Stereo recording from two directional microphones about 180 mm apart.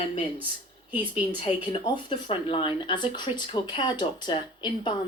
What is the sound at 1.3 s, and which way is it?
Speech, 30° left (ahead or behind).